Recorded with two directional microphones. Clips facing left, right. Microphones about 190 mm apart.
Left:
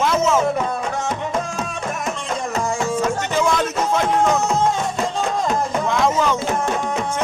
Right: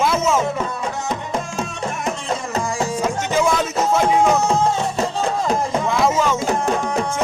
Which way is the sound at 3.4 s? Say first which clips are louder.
Right 2 dB; 5° right (ahead or behind).